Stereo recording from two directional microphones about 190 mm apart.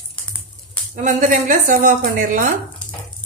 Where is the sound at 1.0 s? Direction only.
40° right (ahead or behind).